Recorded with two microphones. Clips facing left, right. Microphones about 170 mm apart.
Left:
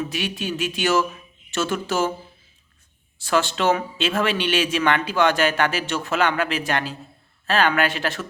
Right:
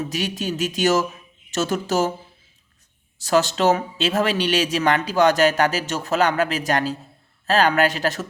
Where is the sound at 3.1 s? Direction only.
40° right (ahead or behind).